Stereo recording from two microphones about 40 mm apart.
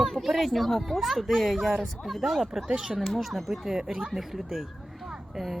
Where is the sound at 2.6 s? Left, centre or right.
Centre.